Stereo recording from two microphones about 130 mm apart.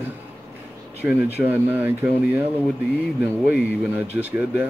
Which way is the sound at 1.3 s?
15° right (ahead or behind).